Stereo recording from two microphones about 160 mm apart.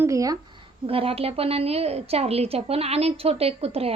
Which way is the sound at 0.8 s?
35° right (ahead or behind).